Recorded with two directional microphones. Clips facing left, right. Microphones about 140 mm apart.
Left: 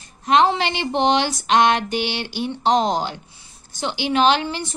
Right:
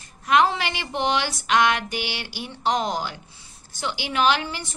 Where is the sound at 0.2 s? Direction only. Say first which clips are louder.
Left 3 dB; 25° left (ahead or behind).